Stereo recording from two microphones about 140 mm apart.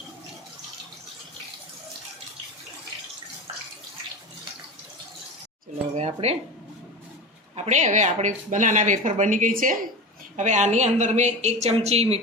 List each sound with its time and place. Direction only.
5.9 s speech: 50° right (ahead or behind)
7.5 s speech: 55° right (ahead or behind); by 9.8 s 80° right
10.3 s speech: 60° right (ahead or behind)